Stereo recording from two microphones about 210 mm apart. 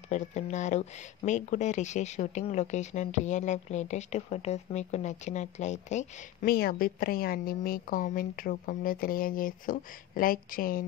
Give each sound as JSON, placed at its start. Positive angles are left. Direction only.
{"t": 0.1, "sound": "speech", "side_deg": 35}